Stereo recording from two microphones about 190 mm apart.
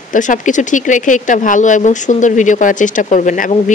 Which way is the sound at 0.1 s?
40° left (ahead or behind).